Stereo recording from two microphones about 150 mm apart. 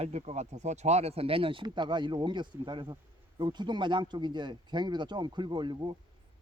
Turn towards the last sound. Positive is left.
turn(degrees=-30)  # may be behind; listen again after turning